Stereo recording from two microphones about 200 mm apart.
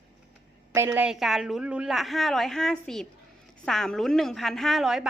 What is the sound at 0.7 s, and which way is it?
A woman's voice, 15° right (ahead or behind).